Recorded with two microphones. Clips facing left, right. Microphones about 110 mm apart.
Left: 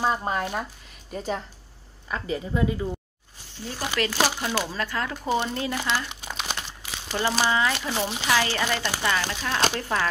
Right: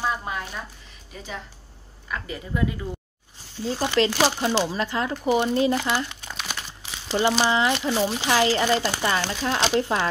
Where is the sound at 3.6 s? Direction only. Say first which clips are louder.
Right 6 dB; 25° right (ahead or behind).